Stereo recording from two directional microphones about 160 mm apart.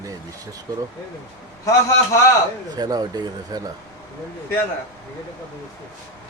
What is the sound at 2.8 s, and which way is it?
Speech, 25° right (ahead or behind).